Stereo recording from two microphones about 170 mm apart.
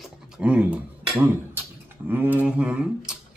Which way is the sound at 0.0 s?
5° right (ahead or behind).